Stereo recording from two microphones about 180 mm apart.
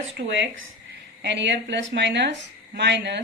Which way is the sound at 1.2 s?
75° right (ahead or behind).